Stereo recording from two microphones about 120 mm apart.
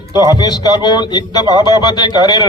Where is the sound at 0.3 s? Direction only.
35° left (ahead or behind).